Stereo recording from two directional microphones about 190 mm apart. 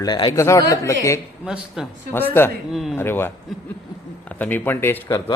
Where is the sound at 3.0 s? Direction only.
10° left (ahead or behind).